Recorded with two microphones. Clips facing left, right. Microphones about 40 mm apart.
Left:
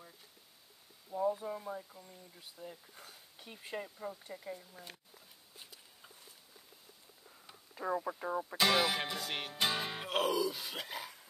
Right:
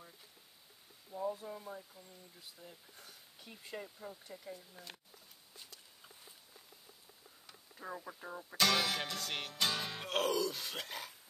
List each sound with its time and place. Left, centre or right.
1.1 s music: centre
3.0 s a sound: left
3.7 s music: centre
7.8 s speech: left
8.3 s music: left; by 11.1 s centre